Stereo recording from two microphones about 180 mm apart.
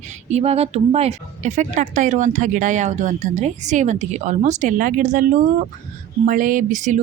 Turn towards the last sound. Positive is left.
turn(degrees=-45)  # may be behind; listen again after turning